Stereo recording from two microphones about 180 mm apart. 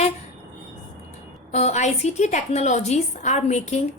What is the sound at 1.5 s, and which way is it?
A woman's voice, 40° left (ahead or behind).